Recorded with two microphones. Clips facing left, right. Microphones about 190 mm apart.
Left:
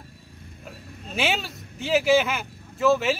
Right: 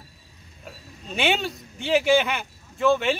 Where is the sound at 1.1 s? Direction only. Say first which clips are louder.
Right 2 dB; centre (ahead or behind).